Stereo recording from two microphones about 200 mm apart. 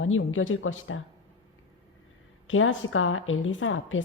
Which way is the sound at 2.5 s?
80° left.